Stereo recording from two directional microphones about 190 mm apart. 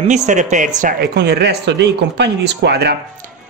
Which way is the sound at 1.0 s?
60° right (ahead or behind).